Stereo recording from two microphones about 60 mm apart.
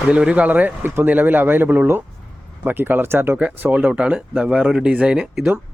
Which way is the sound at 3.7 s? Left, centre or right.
Centre.